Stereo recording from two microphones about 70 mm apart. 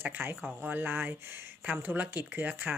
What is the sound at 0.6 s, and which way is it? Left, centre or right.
Speech, right.